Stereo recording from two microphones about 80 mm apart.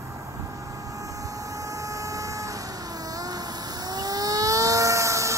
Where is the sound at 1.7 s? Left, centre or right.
Right.